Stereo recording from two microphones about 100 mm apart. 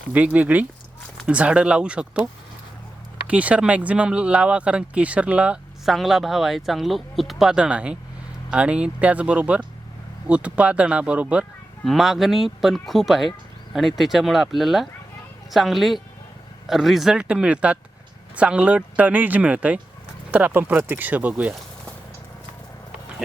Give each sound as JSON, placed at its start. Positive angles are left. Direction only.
{"t": 0.1, "sound": "speech", "side_deg": -15}
{"t": 11.9, "sound": "speech", "side_deg": 0}